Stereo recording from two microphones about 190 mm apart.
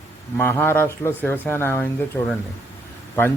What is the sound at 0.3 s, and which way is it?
Speech, 10° left (ahead or behind).